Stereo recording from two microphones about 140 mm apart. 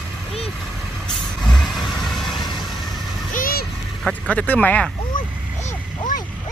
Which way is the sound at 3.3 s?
90° left.